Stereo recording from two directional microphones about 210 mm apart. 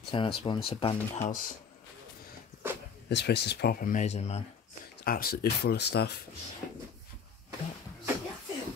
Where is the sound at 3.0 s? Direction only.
50° left (ahead or behind); by 4.4 s 30° left (ahead or behind).